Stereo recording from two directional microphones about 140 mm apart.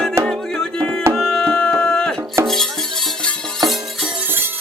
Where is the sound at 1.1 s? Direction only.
5° left (ahead or behind).